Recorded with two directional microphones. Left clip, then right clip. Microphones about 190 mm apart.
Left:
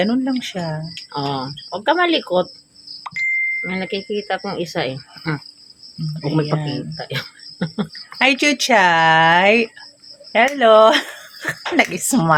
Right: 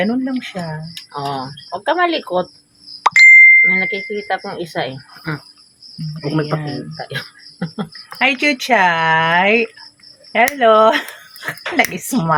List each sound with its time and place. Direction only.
0.0 s speech: 30° left (ahead or behind)
3.0 s plop: 50° right (ahead or behind)
3.6 s speech: 20° left (ahead or behind)